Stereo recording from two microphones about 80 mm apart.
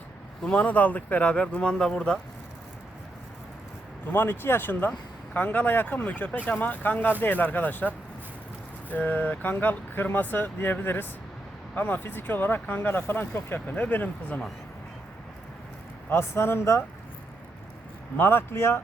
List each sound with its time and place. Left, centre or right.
0.4 s speech: centre
4.0 s speech: left
16.0 s speech: left
18.2 s speech: left